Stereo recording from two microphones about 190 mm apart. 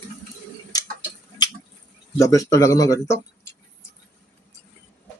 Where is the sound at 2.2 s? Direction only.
15° left (ahead or behind).